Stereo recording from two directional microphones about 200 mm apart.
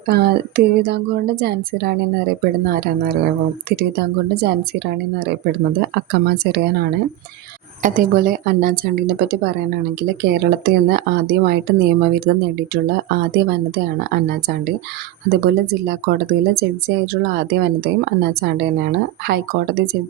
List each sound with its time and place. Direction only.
0.1 s speech: 55° right (ahead or behind)
7.8 s speech: 40° right (ahead or behind)
15.3 s speech: 55° right (ahead or behind)